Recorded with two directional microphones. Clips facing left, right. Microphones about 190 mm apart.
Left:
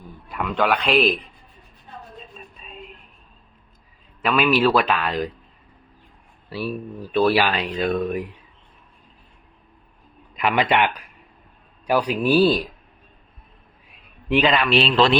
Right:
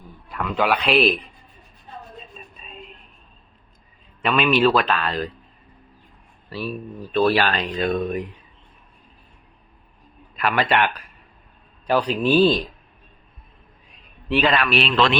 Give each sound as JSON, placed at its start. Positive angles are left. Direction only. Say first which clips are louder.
{"t": 0.3, "sound": "a sound", "louder": "left 1 dB", "side_deg": 5}
{"t": 0.5, "sound": "a man's voice", "louder": "even", "side_deg": -5}
{"t": 2.3, "sound": "a sound", "louder": "left 1 dB", "side_deg": 0}
{"t": 4.2, "sound": "speech", "louder": "even", "side_deg": 0}
{"t": 6.5, "sound": "speech", "louder": "left 1 dB", "side_deg": 10}
{"t": 10.3, "sound": "speech", "louder": "left 1 dB", "side_deg": 15}
{"t": 14.3, "sound": "speech", "louder": "left 1 dB", "side_deg": 15}
{"t": 14.7, "sound": "a man's voice", "louder": "left 2 dB", "side_deg": 30}